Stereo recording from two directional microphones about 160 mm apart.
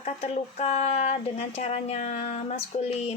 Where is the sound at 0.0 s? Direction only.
40° left (ahead or behind).